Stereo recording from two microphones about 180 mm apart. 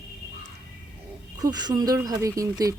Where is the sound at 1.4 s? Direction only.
20° right (ahead or behind).